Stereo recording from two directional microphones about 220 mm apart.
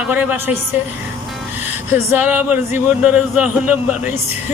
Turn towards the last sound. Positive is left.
turn(degrees=-5)  # may be behind; listen again after turning